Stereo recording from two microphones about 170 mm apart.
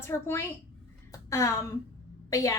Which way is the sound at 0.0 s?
15° left (ahead or behind).